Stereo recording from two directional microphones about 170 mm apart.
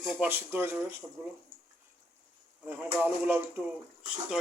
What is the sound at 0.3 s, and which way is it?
Speech, 10° right (ahead or behind).